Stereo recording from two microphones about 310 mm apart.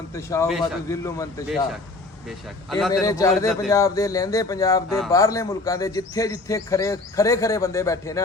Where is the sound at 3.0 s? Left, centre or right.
Centre.